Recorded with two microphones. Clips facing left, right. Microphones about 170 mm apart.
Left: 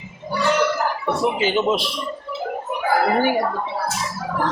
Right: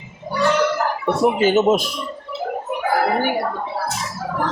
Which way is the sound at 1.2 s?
45° right (ahead or behind).